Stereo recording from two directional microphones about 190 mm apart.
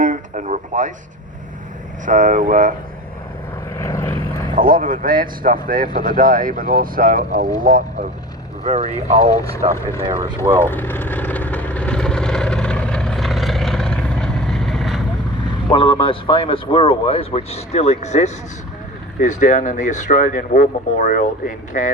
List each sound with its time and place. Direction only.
0.0 s a sound: 40° right (ahead or behind)
2.0 s speech: 45° right (ahead or behind)
3.8 s vehicle: 15° left (ahead or behind)
4.5 s speech: 45° right (ahead or behind)
8.6 s speech: 35° right (ahead or behind); by 10.6 s 20° right (ahead or behind)
10.6 s vehicle: 10° left (ahead or behind)
15.7 s a man's voice: 25° left (ahead or behind); by 21.8 s 45° left (ahead or behind)